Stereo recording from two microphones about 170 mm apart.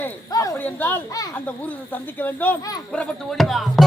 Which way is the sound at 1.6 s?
10° left (ahead or behind).